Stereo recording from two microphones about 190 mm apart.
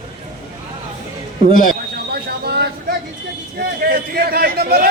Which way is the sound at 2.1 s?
55° right (ahead or behind).